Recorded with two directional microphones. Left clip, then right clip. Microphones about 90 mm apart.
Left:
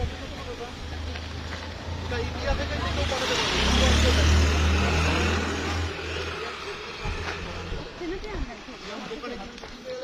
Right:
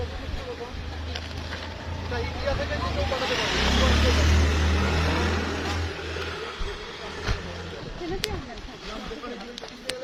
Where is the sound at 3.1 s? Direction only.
45° right (ahead or behind); by 6.7 s 15° right (ahead or behind).